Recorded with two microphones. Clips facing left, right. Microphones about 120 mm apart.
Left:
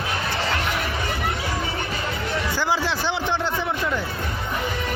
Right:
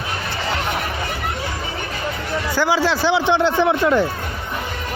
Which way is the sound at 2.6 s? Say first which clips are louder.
Right 8 dB; 90° right.